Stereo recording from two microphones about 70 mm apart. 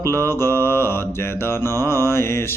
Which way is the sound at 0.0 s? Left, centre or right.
Left.